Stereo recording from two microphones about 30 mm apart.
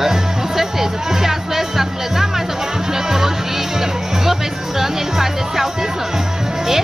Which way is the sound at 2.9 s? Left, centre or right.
Centre.